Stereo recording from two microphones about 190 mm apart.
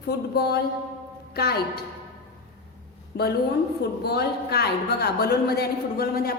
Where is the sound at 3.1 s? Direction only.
60° left (ahead or behind).